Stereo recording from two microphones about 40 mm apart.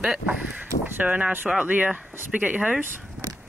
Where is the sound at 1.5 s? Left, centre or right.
Right.